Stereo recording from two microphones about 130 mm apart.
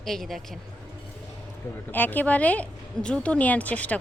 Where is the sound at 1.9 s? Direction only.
15° left (ahead or behind).